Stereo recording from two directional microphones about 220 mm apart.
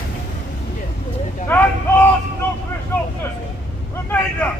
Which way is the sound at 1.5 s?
10° left (ahead or behind).